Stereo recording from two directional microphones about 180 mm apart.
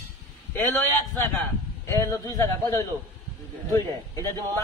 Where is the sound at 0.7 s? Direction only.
15° left (ahead or behind).